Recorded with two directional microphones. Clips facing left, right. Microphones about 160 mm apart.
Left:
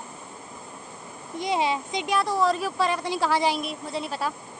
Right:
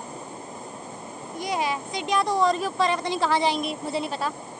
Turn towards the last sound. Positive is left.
turn(degrees=5)  # may be behind; listen again after turning